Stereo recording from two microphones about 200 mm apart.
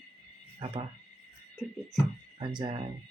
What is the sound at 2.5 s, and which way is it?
Speech, 20° right (ahead or behind).